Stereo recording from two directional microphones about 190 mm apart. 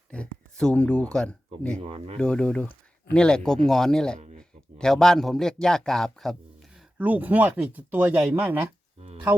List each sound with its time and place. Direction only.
0.1 s speech: 5° left (ahead or behind)
1.8 s speech: 30° right (ahead or behind)
2.1 s a man's voice: 5° left (ahead or behind)
7.0 s speech: 10° right (ahead or behind)